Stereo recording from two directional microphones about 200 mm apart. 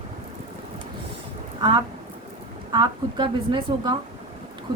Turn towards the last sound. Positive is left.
turn(degrees=-20)  # may be behind; listen again after turning